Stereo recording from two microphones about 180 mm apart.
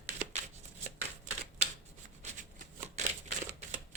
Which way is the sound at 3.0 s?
40° right (ahead or behind).